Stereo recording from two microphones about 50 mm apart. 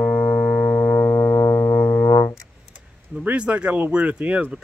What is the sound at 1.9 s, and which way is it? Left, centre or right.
Music, left.